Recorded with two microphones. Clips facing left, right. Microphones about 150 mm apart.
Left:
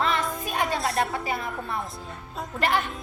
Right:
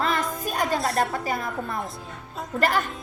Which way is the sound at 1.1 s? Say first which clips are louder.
Right 2 dB; 40° right (ahead or behind).